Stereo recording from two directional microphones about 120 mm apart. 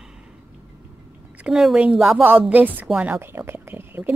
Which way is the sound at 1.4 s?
5° right (ahead or behind).